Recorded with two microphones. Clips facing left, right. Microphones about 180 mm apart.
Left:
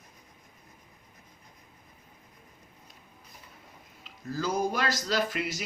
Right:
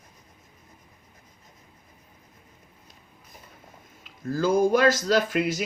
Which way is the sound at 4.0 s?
50° right (ahead or behind).